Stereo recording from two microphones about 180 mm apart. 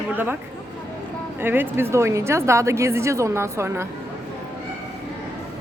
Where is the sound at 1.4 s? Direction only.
10° right (ahead or behind).